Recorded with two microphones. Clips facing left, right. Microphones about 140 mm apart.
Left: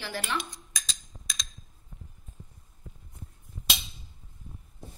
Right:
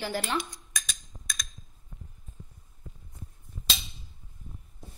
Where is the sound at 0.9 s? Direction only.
25° left (ahead or behind).